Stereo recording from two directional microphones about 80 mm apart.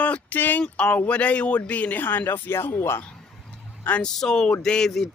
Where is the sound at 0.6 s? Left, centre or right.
Centre; by 2.7 s left.